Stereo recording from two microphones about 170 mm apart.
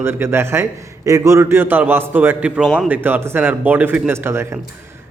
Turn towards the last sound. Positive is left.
turn(degrees=-15)  # may be behind; listen again after turning